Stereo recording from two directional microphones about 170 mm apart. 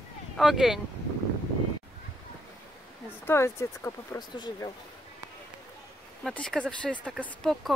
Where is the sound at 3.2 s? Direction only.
15° left (ahead or behind).